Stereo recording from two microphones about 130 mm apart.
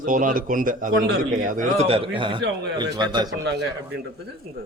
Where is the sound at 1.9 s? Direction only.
45° right (ahead or behind).